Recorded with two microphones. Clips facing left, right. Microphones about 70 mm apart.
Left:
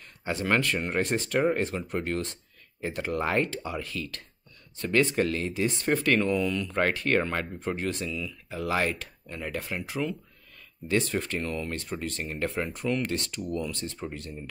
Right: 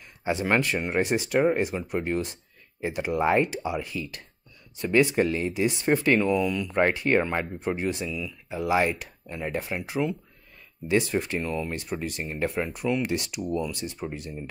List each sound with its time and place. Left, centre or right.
0.2 s speech: centre
6.1 s speech: centre
12.4 s speech: centre